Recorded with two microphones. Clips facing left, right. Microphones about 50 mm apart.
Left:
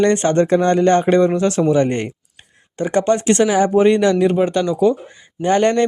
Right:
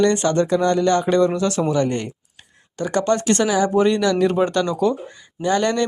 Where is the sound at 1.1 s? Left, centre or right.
Left.